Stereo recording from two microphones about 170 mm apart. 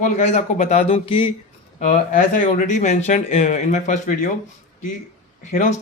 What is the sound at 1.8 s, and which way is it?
Speech, 50° left (ahead or behind).